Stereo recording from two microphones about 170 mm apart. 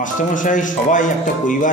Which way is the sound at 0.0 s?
50° left (ahead or behind).